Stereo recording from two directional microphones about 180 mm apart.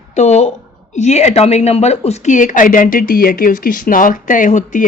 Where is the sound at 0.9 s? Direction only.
40° left (ahead or behind).